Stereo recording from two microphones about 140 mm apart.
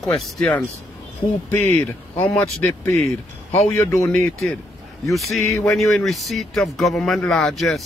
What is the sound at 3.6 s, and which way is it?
Speech, 20° left (ahead or behind).